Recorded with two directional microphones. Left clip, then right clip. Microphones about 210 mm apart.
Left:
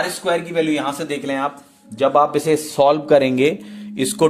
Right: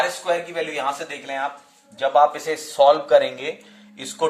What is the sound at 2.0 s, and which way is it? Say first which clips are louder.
Speech: left 2 dB; 45° left (ahead or behind).